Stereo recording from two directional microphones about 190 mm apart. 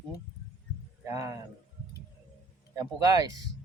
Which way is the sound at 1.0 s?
15° right (ahead or behind).